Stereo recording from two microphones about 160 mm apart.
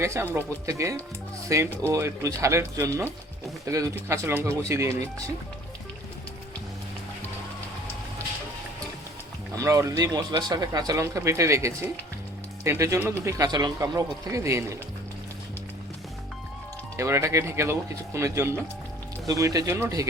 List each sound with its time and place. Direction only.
0.0 s speech: 15° right (ahead or behind)
9.6 s speech: 20° right (ahead or behind)
17.0 s speech: 15° right (ahead or behind)